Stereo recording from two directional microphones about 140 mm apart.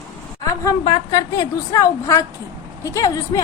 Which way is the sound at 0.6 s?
25° left (ahead or behind).